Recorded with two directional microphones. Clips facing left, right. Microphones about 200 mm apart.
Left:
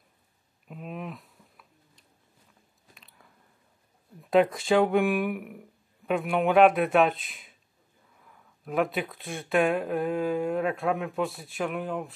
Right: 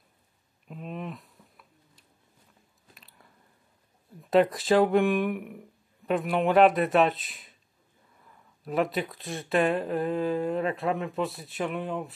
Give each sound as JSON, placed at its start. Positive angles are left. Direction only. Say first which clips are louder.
{"t": 0.7, "sound": "a sound", "louder": "right 1 dB", "side_deg": 5}
{"t": 2.9, "sound": "biting", "louder": "even", "side_deg": 0}
{"t": 4.2, "sound": "speech", "louder": "even", "side_deg": 0}
{"t": 8.6, "sound": "speech", "louder": "even", "side_deg": 0}